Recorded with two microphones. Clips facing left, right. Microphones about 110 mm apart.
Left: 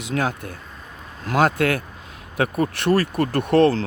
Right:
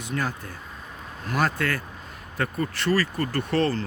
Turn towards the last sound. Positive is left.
turn(degrees=75)  # may be behind; listen again after turning